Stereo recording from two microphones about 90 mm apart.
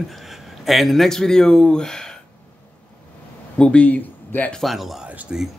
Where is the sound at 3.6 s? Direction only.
15° left (ahead or behind).